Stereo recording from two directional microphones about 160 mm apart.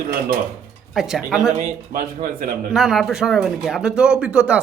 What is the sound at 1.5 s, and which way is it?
Speech, 50° right (ahead or behind).